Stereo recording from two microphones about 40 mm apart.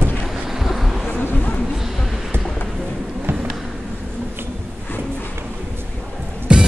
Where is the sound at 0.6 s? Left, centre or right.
Centre.